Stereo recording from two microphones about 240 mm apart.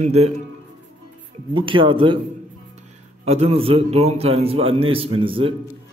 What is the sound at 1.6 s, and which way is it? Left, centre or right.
Speech, right.